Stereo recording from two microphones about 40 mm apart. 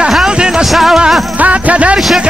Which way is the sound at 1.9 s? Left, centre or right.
Centre.